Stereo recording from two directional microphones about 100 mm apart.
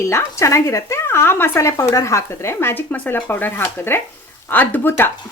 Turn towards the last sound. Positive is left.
turn(degrees=20)  # may be behind; listen again after turning